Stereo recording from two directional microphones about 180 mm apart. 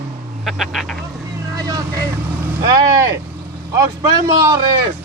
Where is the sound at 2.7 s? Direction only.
20° right (ahead or behind).